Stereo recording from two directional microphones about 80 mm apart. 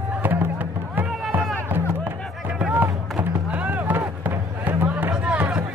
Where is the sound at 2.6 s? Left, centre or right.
Centre.